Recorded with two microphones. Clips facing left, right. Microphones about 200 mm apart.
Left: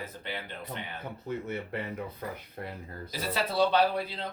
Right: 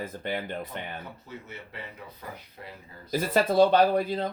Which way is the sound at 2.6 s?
55° left (ahead or behind).